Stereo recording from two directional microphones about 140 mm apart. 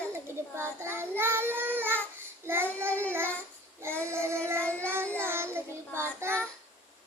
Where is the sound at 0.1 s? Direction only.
15° right (ahead or behind).